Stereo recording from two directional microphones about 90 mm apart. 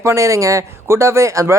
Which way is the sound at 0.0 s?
35° right (ahead or behind).